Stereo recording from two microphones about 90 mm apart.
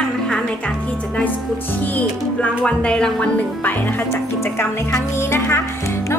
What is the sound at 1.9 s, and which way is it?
Speech, 15° left (ahead or behind).